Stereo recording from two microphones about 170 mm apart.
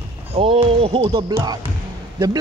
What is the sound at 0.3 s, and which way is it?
Speech, 30° right (ahead or behind).